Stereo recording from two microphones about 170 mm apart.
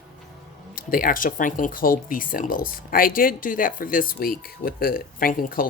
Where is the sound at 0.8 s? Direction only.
55° left (ahead or behind).